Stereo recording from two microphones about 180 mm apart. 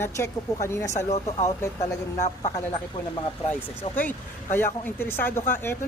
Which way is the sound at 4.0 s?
10° left (ahead or behind).